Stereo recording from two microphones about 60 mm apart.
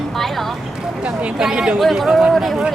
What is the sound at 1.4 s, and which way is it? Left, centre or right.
Speech, centre.